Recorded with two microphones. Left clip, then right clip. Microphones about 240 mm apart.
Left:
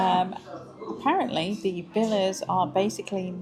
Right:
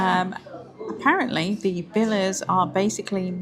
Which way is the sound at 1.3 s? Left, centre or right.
Right.